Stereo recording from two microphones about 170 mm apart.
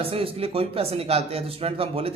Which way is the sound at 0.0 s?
35° right (ahead or behind).